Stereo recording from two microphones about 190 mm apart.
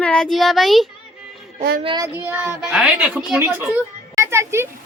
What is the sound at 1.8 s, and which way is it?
Speech, 25° right (ahead or behind).